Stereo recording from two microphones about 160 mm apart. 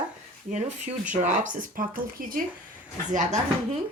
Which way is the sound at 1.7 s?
60° right (ahead or behind).